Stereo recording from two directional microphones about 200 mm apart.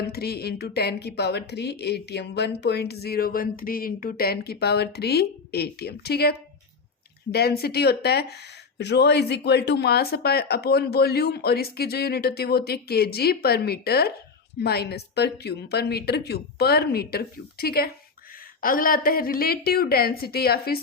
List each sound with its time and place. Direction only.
0.0 s a woman's voice: 50° left (ahead or behind)